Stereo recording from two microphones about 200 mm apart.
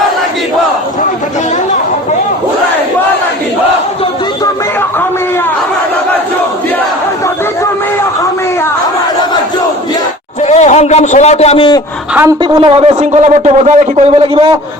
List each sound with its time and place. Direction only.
10.4 s a man's voice: 35° left (ahead or behind)
12.4 s a man's voice: 30° right (ahead or behind)